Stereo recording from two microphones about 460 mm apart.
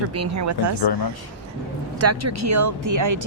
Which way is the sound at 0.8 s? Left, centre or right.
Left.